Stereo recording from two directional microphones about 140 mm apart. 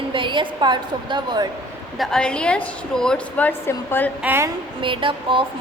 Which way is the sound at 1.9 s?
Centre (ahead or behind).